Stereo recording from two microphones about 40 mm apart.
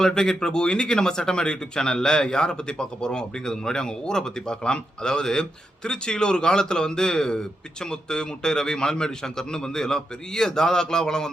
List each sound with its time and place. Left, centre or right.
0.0 s speech: centre